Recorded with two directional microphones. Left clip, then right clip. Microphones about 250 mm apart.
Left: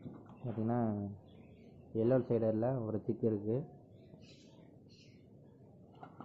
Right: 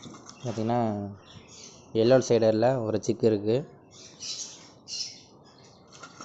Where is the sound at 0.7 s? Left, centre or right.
Right.